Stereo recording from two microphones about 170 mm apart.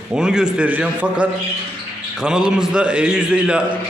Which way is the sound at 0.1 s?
5° right (ahead or behind).